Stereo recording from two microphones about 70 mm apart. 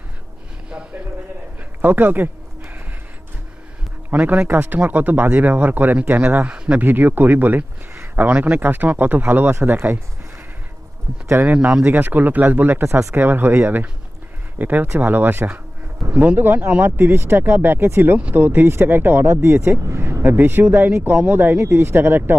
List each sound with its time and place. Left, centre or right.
1.8 s a sound: right
4.1 s speech: right
11.4 s speech: right
13.1 s speech: right